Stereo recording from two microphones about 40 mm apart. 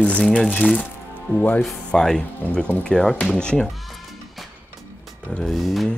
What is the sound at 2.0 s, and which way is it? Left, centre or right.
Speech, centre.